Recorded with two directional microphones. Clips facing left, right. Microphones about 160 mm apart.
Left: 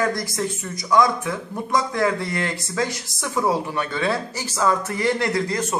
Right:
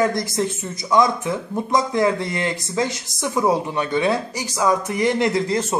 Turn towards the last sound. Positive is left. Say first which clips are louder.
# right 2 dB
turn(degrees=-25)  # may be behind; listen again after turning